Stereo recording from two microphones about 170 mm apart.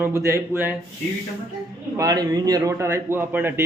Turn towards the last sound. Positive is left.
turn(degrees=-10)  # may be behind; listen again after turning